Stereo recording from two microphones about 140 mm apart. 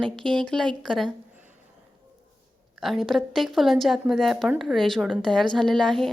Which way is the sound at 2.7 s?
Centre (ahead or behind).